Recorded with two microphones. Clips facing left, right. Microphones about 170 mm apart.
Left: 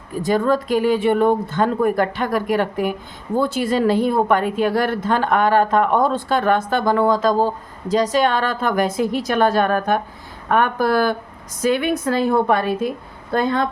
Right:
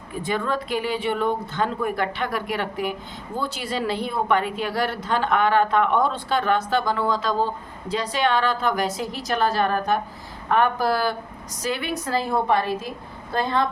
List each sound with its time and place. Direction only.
0.2 s a woman's voice: 40° left (ahead or behind); by 13.7 s 55° left (ahead or behind)